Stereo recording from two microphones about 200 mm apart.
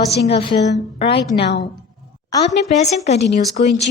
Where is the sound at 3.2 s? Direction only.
55° left (ahead or behind).